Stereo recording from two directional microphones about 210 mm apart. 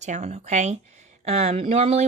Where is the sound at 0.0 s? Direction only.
35° right (ahead or behind).